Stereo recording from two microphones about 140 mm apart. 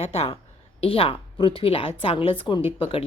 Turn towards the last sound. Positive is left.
turn(degrees=40)  # may be behind; listen again after turning